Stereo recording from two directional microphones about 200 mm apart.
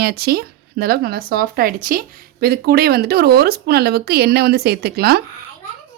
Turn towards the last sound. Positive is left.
turn(degrees=-50)  # may be behind; listen again after turning